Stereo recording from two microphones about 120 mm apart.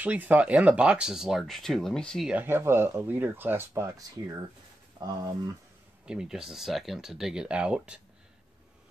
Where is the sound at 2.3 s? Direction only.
15° right (ahead or behind).